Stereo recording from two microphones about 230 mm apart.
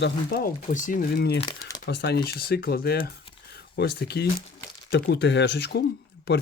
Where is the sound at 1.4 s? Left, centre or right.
Left.